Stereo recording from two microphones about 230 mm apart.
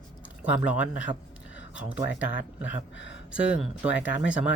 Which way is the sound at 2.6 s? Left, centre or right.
Left.